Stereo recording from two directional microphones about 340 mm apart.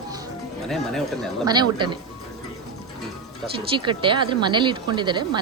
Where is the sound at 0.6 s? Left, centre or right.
Centre.